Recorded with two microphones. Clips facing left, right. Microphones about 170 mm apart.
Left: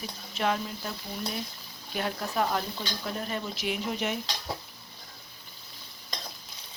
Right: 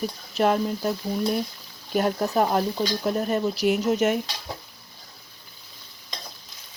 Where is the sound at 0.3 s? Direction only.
40° right (ahead or behind).